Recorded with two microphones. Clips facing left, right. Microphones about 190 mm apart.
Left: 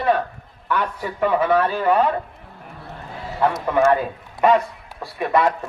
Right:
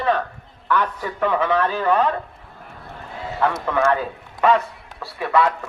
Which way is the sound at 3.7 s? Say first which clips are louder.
Left 4 dB; 15° left (ahead or behind).